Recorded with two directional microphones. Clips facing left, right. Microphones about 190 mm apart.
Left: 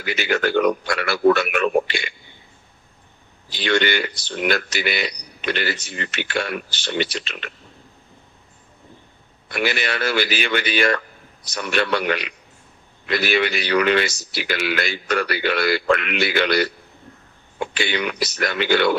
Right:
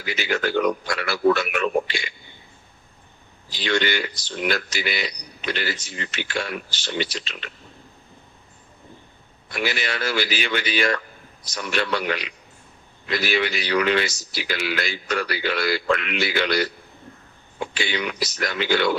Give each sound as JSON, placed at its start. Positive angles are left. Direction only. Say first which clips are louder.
{"t": 0.0, "sound": "speech", "louder": "left 3 dB", "side_deg": 60}
{"t": 3.5, "sound": "speech", "louder": "left 3 dB", "side_deg": 60}
{"t": 9.5, "sound": "speech", "louder": "left 3 dB", "side_deg": 60}